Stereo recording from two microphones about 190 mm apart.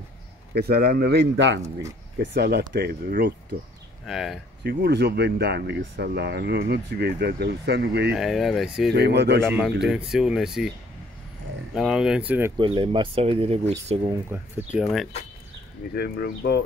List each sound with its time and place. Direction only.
0.6 s speech: 55° right (ahead or behind)
4.0 s speech: centre (ahead or behind)
4.6 s speech: 60° right (ahead or behind)
8.1 s speech: centre (ahead or behind)
8.9 s speech: 60° right (ahead or behind)
9.8 s speech: centre (ahead or behind)
11.7 s speech: 5° right (ahead or behind)
12.5 s speech: 25° right (ahead or behind)
14.3 s speech: 10° right (ahead or behind)
15.9 s speech: 55° left (ahead or behind)